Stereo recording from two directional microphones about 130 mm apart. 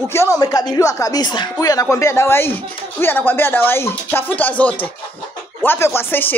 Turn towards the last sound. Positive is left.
turn(degrees=15)  # may be behind; listen again after turning